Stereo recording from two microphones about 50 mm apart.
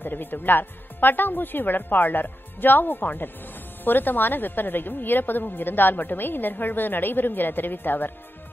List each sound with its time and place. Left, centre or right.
0.0 s a woman's voice: left